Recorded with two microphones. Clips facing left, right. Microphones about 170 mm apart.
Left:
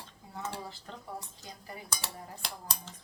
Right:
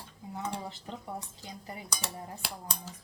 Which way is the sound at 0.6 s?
20° right (ahead or behind).